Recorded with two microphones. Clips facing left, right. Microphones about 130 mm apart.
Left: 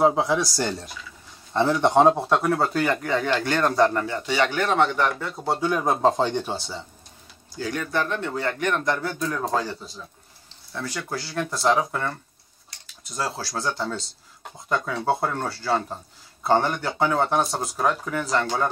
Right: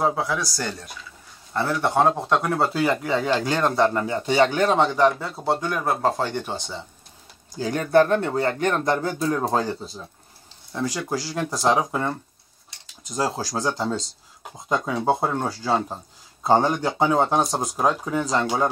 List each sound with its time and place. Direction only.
0.0 s speech: 20° left (ahead or behind)
2.1 s speech: 5° left (ahead or behind); by 5.3 s 35° right (ahead or behind)
5.3 s speech: centre (ahead or behind); by 6.5 s 15° left (ahead or behind)
7.7 s speech: 40° right (ahead or behind)
10.7 s speech: 20° right (ahead or behind)